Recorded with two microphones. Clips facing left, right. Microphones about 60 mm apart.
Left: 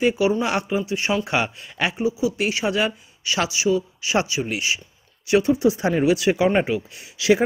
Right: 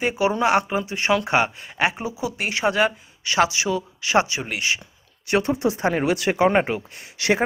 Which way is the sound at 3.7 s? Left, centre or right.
Right.